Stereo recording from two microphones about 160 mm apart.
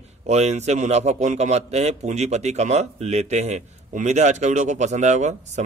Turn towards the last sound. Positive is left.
turn(degrees=-45)  # may be behind; listen again after turning